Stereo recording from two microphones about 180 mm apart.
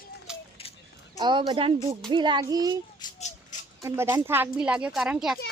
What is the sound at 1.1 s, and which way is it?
A child's voice, 25° right (ahead or behind).